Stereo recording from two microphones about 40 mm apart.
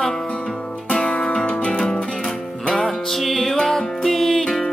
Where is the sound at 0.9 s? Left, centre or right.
Left.